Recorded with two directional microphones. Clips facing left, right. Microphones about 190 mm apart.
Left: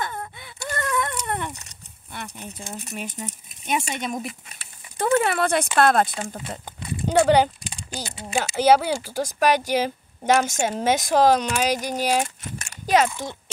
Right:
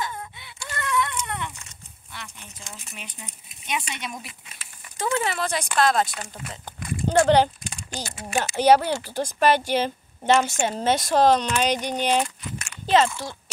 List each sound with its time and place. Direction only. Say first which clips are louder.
0.0 s a sound: left 2 dB; 50° left (ahead or behind)
2.2 s speech: left 7 dB; 40° left (ahead or behind)
4.9 s speech: left 5 dB; 60° left (ahead or behind)
6.6 s horse: right 3 dB; 10° left (ahead or behind)
7.9 s speech: left 1 dB; 15° left (ahead or behind)